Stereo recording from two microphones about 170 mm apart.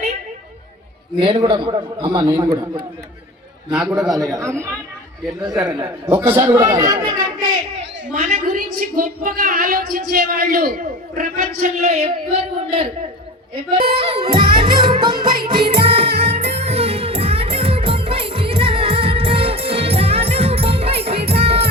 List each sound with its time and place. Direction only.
1.2 s a man's voice: 30° right (ahead or behind)
3.7 s a man's voice: 5° right (ahead or behind)
4.1 s a man's voice: 20° right (ahead or behind)
5.8 s a man's voice: 15° right (ahead or behind)
8.2 s a woman's voice: 45° right (ahead or behind)
13.9 s music: 30° right (ahead or behind)